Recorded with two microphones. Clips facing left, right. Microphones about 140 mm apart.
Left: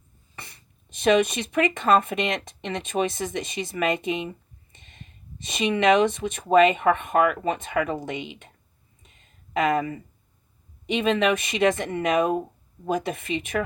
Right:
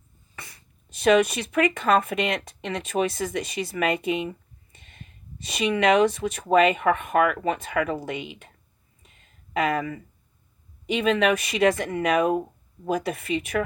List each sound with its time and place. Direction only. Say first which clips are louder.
0.3 s speech: even; 25° left (ahead or behind)
4.7 s a sound: right 1 dB; 25° left (ahead or behind)
5.5 s speech: left 1 dB; 25° left (ahead or behind)
9.5 s speech: left 2 dB; 30° left (ahead or behind)